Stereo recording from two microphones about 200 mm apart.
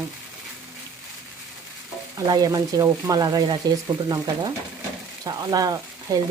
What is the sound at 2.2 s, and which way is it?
Speech, 20° right (ahead or behind).